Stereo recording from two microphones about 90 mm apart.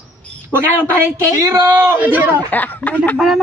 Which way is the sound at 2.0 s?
20° right (ahead or behind).